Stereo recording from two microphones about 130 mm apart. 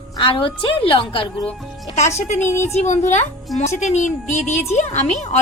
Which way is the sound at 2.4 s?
20° left (ahead or behind).